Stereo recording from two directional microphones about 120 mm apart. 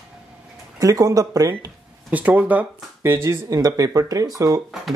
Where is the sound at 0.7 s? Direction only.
30° right (ahead or behind).